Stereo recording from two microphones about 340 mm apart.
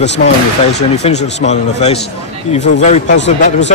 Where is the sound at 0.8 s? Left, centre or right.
Centre.